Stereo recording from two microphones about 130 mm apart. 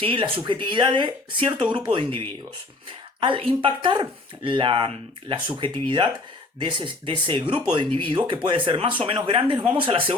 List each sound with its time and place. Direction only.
0.0 s speech: 40° right (ahead or behind)